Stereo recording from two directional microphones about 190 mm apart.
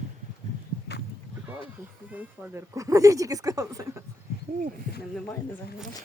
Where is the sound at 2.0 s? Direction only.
10° right (ahead or behind).